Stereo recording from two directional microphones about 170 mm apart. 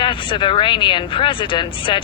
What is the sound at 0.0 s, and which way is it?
Speech, 30° left (ahead or behind).